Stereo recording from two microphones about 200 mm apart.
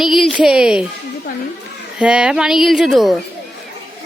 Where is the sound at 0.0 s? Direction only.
Centre (ahead or behind).